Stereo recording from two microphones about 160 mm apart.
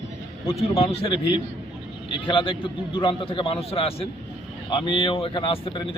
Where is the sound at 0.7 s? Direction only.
40° left (ahead or behind).